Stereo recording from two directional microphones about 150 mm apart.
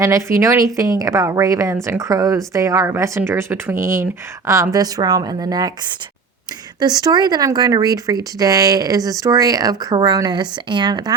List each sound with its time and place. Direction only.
0.0 s a woman's voice: 20° right (ahead or behind)
6.7 s a woman's voice: 25° right (ahead or behind)